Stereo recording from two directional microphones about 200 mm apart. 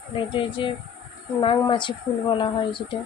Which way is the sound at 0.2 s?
25° left (ahead or behind).